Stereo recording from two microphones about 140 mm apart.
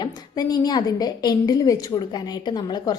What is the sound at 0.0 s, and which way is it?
A woman's voice, 30° left (ahead or behind).